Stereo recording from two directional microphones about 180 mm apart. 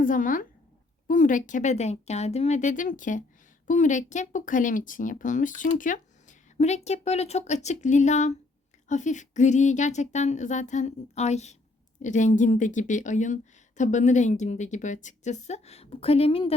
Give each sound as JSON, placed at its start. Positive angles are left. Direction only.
{"t": 0.0, "sound": "speech", "side_deg": 45}